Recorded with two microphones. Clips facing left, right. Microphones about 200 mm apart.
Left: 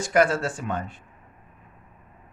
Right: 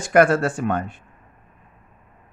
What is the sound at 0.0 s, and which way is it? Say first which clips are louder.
Speech: right 5 dB; 55° right (ahead or behind).